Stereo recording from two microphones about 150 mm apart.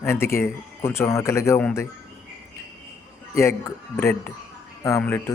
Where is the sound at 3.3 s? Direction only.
20° left (ahead or behind).